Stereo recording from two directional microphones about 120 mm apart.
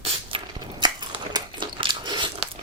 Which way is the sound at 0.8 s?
40° right (ahead or behind).